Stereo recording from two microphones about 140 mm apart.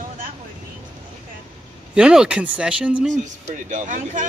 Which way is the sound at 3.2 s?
65° right (ahead or behind).